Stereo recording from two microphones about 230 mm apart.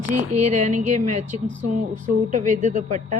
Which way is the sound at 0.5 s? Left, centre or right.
Right.